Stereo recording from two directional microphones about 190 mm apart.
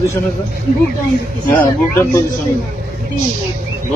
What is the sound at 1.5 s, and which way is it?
Speech, 10° left (ahead or behind).